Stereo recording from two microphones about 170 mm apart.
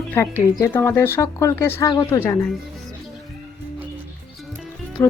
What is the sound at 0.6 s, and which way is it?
Speech, 15° left (ahead or behind).